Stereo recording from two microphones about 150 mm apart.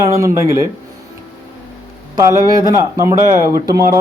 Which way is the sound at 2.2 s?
25° right (ahead or behind).